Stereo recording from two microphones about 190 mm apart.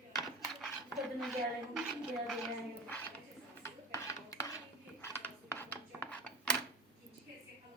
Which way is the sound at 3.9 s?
20° left (ahead or behind).